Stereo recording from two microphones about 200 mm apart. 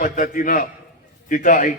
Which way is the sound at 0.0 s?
40° left (ahead or behind).